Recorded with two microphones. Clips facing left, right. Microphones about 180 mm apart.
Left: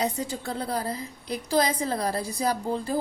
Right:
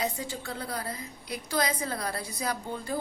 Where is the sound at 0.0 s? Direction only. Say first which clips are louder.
Left 4 dB; 35° left (ahead or behind).